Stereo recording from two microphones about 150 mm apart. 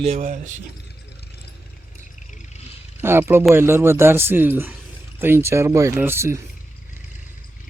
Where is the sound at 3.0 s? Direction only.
15° right (ahead or behind).